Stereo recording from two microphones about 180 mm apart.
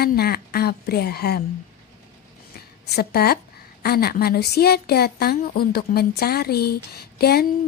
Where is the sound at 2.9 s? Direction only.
60° left (ahead or behind).